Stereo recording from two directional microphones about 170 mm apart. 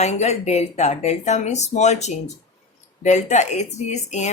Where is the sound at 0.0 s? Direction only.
40° left (ahead or behind).